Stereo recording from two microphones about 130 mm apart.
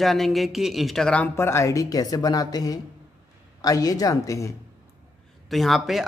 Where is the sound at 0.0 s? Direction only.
Centre (ahead or behind).